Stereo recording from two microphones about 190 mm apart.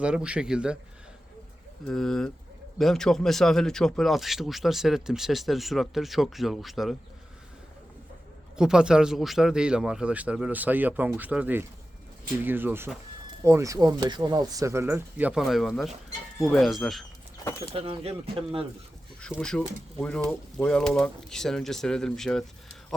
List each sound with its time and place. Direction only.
0.0 s speech: 5° right (ahead or behind)
1.9 s speech: centre (ahead or behind)
8.5 s speech: 5° right (ahead or behind)
17.7 s speech: 30° right (ahead or behind)
19.2 s speech: 5° left (ahead or behind)